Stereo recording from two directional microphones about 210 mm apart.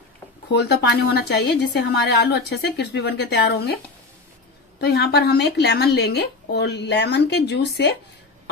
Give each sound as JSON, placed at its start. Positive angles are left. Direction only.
{"t": 0.5, "sound": "a woman's voice", "side_deg": 50}
{"t": 4.7, "sound": "a woman's voice", "side_deg": 50}